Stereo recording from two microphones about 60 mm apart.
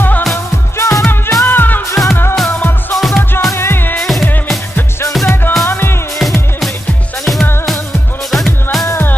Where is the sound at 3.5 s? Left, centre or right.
Left.